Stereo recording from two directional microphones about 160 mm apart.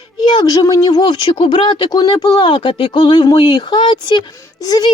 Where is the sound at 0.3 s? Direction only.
20° left (ahead or behind).